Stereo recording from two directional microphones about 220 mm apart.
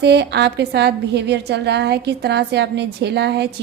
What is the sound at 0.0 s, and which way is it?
A woman's voice, 50° right (ahead or behind).